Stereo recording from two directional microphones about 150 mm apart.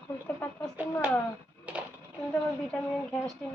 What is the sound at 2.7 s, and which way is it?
Speech, 5° left (ahead or behind).